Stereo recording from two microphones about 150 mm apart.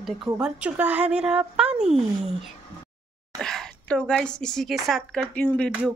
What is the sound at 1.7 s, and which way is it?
Speech, 45° right (ahead or behind).